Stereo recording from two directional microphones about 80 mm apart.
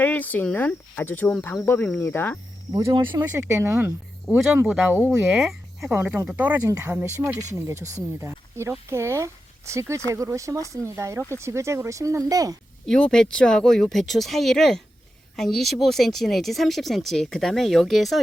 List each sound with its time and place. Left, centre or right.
0.0 s speech: left
2.9 s speech: right
3.3 s speech: right
5.2 s speech: centre
5.9 s speech: right
7.3 s speech: right
12.8 s speech: centre